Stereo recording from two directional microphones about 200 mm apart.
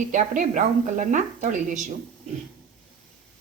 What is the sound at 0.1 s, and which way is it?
A woman's voice, 40° right (ahead or behind).